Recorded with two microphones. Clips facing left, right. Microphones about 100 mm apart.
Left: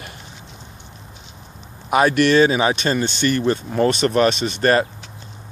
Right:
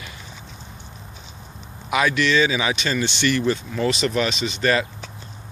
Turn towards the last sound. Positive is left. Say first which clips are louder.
# left 4 dB
turn(degrees=45)  # may be behind; listen again after turning